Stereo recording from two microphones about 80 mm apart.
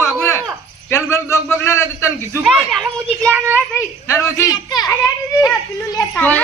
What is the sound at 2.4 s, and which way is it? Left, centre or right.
Speech, centre.